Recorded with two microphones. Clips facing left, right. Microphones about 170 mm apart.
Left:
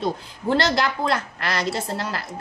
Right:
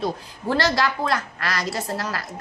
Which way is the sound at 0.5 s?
25° left (ahead or behind).